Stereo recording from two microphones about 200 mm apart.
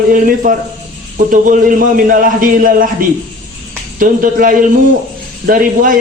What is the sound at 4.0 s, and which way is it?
A man's voice, 45° right (ahead or behind).